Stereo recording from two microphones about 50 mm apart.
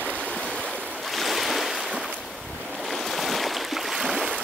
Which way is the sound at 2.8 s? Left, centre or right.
Centre.